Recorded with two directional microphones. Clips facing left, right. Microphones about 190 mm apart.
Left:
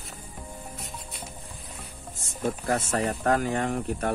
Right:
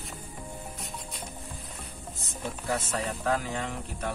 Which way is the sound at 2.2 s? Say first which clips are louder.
Left 8 dB; 50° left (ahead or behind).